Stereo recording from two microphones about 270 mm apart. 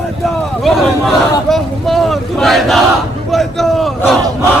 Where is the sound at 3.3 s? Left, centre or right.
Centre.